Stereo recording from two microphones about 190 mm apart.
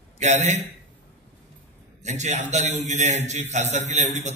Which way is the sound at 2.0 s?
40° right (ahead or behind).